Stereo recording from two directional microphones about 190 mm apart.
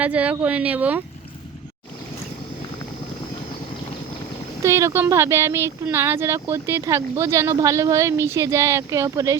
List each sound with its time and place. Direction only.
0.0 s speech: 5° right (ahead or behind)
4.6 s speech: 15° right (ahead or behind)